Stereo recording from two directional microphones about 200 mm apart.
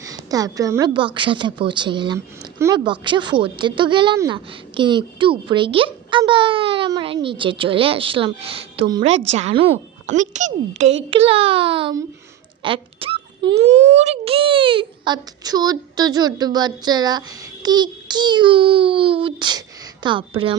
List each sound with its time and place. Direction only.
0.0 s a woman's voice: 20° right (ahead or behind)